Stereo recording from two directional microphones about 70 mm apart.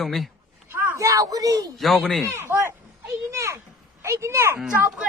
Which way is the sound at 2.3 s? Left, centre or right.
Right.